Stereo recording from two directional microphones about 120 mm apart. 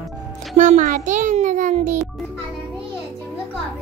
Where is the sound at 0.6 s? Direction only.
90° right.